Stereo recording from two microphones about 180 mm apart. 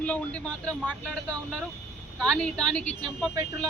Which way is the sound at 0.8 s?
5° right (ahead or behind).